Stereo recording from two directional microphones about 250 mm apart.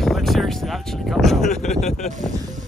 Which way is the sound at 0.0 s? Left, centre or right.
Centre.